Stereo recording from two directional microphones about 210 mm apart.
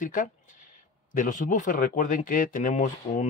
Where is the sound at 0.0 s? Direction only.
40° left (ahead or behind).